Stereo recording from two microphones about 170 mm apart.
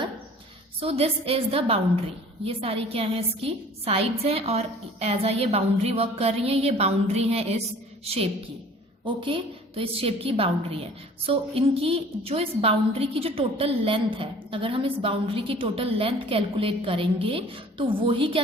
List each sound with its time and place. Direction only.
0.8 s a woman's voice: 35° right (ahead or behind)